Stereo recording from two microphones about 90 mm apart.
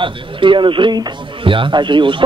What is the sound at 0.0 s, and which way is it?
Speech, 70° right (ahead or behind).